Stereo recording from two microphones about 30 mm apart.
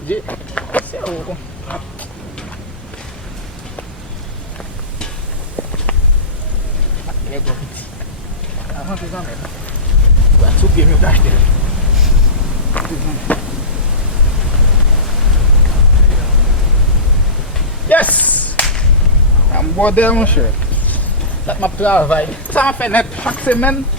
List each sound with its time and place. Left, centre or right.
0.1 s a sound: left
5.6 s a sound: left
8.9 s speech: left
10.6 s speech: left
12.8 s insect: left
13.3 s a sound: left
17.8 s whip: left
18.6 s whip: centre
19.5 s speech: left
21.4 s speech: left